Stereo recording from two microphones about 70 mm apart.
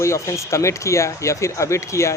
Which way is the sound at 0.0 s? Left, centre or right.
Left.